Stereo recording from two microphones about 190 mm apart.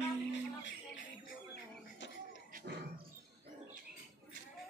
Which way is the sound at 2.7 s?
60° right (ahead or behind).